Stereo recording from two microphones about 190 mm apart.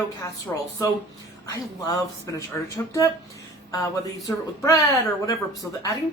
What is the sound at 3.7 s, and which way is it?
Speech, 15° left (ahead or behind).